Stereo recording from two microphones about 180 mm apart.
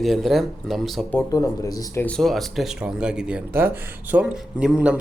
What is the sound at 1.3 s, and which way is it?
Speech, 20° left (ahead or behind).